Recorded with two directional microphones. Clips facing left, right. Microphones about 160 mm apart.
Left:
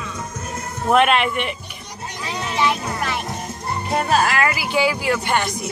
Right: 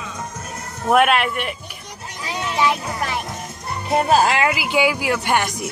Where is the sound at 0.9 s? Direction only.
5° right (ahead or behind).